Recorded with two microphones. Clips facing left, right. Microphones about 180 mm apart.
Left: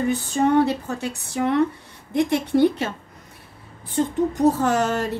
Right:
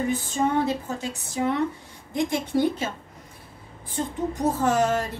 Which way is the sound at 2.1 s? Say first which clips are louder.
Left 5 dB; 65° left (ahead or behind).